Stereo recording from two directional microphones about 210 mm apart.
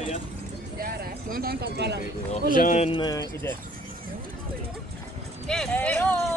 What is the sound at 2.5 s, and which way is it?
Speech, 40° left (ahead or behind).